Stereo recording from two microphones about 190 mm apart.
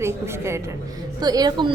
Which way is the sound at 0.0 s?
15° right (ahead or behind).